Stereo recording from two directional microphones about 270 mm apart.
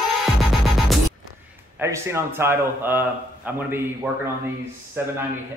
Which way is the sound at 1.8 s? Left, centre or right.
Centre.